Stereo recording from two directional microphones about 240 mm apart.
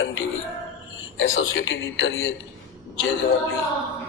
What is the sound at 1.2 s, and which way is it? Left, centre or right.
A man's voice, left.